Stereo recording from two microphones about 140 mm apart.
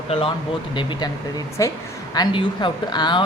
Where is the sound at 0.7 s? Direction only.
35° left (ahead or behind).